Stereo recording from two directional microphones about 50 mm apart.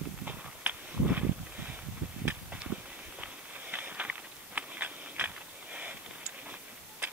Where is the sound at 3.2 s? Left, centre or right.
Right.